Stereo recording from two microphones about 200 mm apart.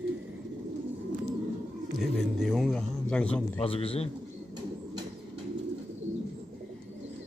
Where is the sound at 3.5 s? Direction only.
30° left (ahead or behind).